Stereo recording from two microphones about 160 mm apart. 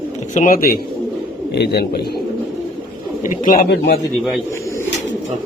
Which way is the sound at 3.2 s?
60° left (ahead or behind).